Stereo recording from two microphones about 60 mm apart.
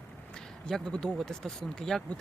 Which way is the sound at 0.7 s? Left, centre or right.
Centre.